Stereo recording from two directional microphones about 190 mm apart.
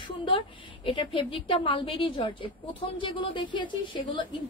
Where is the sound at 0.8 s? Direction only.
25° left (ahead or behind).